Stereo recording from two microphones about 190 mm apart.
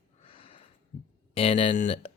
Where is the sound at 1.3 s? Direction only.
30° left (ahead or behind).